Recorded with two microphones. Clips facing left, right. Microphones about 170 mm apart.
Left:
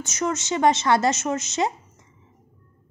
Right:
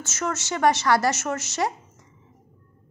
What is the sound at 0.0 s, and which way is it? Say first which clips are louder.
A woman's voice: left 3 dB; 15° left (ahead or behind).